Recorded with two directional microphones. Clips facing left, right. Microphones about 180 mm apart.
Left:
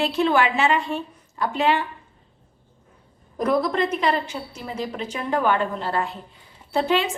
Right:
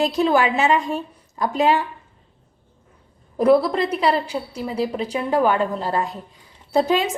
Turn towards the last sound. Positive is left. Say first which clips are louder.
# right 3 dB
turn(degrees=-40)  # may be behind; listen again after turning